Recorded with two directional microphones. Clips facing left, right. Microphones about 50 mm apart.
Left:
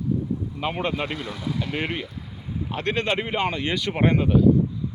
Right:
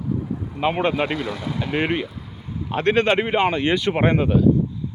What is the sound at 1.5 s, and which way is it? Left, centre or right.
Speech, right.